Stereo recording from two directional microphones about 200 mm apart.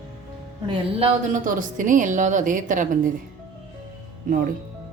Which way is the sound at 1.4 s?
40° right (ahead or behind).